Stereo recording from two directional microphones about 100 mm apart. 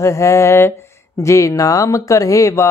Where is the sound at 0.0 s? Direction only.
30° left (ahead or behind).